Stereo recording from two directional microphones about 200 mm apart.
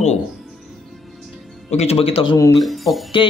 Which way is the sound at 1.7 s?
30° left (ahead or behind).